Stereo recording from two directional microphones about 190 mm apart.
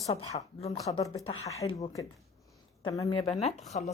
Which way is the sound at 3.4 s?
35° left (ahead or behind).